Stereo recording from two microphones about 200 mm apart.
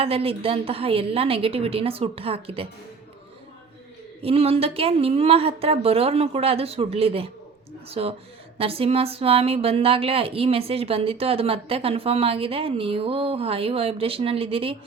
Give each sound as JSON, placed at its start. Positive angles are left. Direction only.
{"t": 0.0, "sound": "a woman's voice", "side_deg": -30}
{"t": 4.2, "sound": "a woman's voice", "side_deg": -30}